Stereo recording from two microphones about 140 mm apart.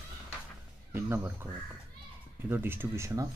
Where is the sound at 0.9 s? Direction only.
15° right (ahead or behind).